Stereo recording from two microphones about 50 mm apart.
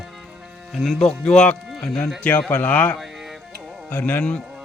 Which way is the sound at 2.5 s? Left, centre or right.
Left.